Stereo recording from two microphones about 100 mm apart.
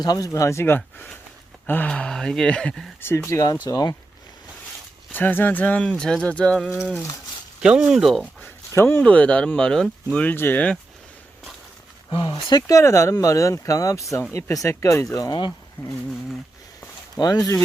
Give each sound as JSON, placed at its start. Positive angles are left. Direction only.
{"t": 0.0, "sound": "speech", "side_deg": 40}
{"t": 0.3, "sound": "speech", "side_deg": 30}
{"t": 1.9, "sound": "speech", "side_deg": 5}
{"t": 3.0, "sound": "speech", "side_deg": 20}
{"t": 5.1, "sound": "speech", "side_deg": 20}
{"t": 6.7, "sound": "speech", "side_deg": -5}
{"t": 8.4, "sound": "speech", "side_deg": 25}
{"t": 12.1, "sound": "speech", "side_deg": 50}
{"t": 17.2, "sound": "speech", "side_deg": 40}